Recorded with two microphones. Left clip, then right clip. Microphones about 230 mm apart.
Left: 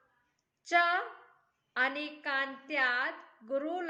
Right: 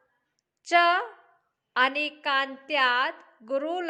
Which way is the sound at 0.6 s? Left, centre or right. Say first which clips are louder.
Right 7 dB; right.